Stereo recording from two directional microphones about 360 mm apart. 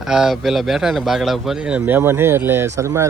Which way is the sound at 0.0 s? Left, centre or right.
Centre.